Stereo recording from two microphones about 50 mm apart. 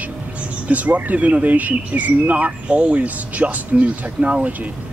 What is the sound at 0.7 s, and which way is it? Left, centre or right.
Speech, right.